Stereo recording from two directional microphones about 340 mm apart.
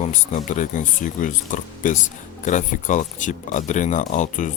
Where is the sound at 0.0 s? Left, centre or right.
Left.